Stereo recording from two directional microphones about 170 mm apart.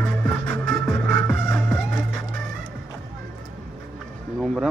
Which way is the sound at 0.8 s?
5° left (ahead or behind).